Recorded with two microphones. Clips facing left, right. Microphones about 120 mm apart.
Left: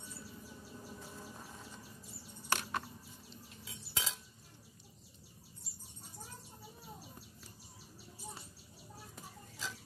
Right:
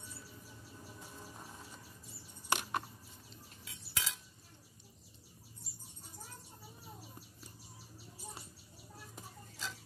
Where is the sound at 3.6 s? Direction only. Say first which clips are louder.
Left 1 dB; 25° left (ahead or behind).